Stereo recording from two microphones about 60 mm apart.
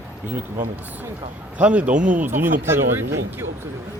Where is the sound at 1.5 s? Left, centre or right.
Right.